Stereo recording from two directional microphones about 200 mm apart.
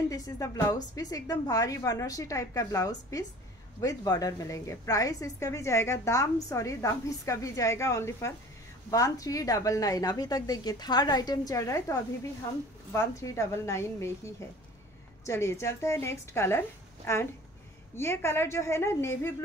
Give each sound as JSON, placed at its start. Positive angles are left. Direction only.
{"t": 0.1, "sound": "a woman's voice", "side_deg": 15}